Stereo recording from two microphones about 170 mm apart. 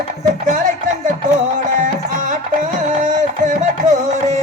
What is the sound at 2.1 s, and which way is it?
Music, 50° right (ahead or behind).